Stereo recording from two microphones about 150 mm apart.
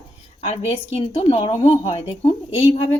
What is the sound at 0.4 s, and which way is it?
A woman's voice, 40° left (ahead or behind).